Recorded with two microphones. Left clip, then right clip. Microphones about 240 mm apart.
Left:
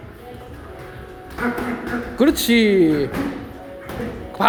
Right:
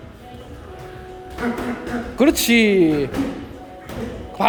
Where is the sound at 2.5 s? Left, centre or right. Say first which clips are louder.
Even; centre.